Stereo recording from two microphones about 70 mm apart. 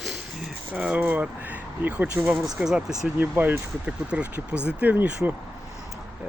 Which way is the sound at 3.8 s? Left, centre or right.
Centre.